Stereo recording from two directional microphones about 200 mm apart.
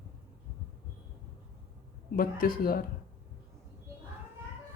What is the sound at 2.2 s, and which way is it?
Speech, 45° left (ahead or behind).